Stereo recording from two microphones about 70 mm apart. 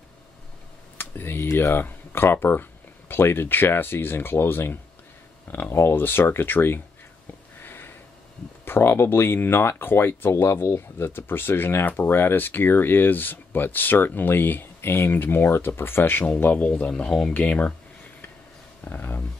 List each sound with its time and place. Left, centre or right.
0.9 s speech: left
7.5 s a sound: left
8.6 s speech: left; by 17.3 s centre
17.3 s speech: left
18.9 s speech: left